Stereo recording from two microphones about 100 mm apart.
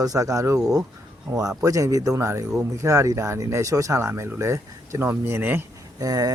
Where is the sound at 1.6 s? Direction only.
35° right (ahead or behind).